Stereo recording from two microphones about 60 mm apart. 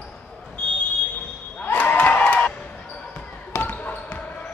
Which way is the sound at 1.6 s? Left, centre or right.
Left.